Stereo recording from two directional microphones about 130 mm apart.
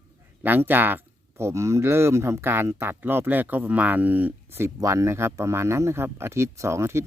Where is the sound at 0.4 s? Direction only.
15° right (ahead or behind).